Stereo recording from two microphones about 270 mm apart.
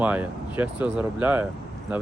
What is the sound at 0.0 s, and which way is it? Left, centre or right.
Speech, centre.